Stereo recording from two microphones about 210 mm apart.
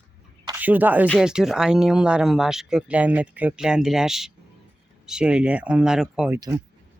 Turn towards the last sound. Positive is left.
turn(degrees=-5)  # may be behind; listen again after turning